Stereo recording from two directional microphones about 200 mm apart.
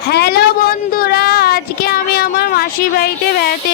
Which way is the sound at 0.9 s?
50° left (ahead or behind).